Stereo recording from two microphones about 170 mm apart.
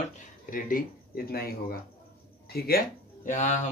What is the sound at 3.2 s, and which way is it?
Speech, 45° left (ahead or behind).